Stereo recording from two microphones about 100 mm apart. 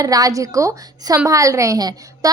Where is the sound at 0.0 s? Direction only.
35° right (ahead or behind).